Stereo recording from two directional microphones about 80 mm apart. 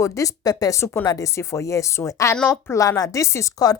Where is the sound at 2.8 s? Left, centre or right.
Left.